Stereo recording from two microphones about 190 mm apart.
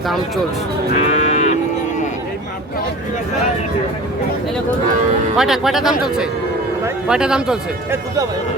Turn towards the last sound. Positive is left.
turn(degrees=-5)  # may be behind; listen again after turning